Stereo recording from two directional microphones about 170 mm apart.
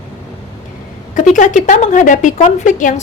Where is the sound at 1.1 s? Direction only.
45° left (ahead or behind).